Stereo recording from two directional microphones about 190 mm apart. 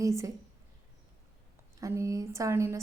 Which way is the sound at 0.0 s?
15° right (ahead or behind).